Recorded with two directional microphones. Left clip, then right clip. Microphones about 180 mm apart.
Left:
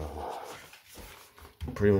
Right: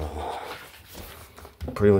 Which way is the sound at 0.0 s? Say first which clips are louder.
Right 5 dB; 15° right (ahead or behind).